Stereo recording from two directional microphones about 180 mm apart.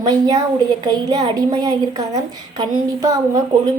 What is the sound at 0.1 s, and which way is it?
A woman's voice, 20° right (ahead or behind).